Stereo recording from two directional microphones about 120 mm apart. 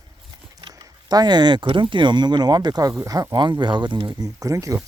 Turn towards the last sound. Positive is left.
turn(degrees=-25)  # may be behind; listen again after turning